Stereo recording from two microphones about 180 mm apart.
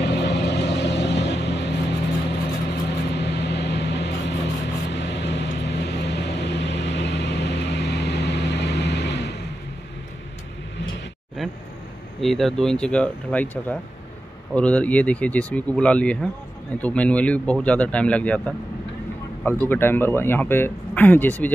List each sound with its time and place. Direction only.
0.0 s vehicle: 70° left (ahead or behind)
4.9 s music: 75° left (ahead or behind)
12.2 s speech: centre (ahead or behind)